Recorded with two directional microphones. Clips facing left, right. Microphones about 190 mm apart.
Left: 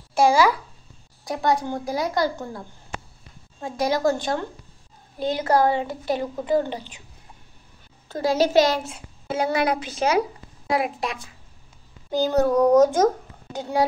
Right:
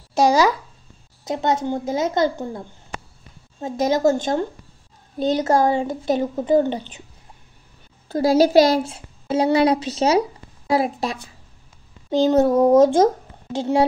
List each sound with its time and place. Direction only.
1.2 s a woman's voice: 20° right (ahead or behind)
3.6 s a woman's voice: 20° right (ahead or behind)
8.1 s a woman's voice: 35° right (ahead or behind)